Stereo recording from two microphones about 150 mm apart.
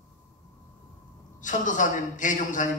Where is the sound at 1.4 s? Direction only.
55° left (ahead or behind).